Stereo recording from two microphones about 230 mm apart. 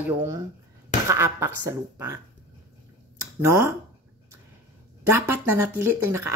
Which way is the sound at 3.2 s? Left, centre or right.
Centre.